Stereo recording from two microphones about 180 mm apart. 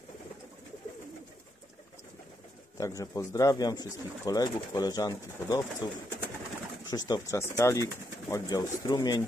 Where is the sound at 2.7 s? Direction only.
20° left (ahead or behind).